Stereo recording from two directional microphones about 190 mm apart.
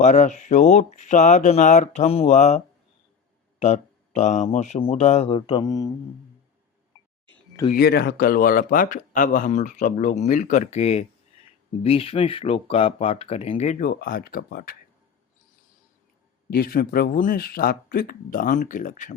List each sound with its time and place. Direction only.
0.0 s speech: 40° left (ahead or behind)
3.6 s speech: 35° left (ahead or behind); by 5.9 s 20° left (ahead or behind)
7.7 s speech: 55° left (ahead or behind)
16.5 s speech: 50° left (ahead or behind)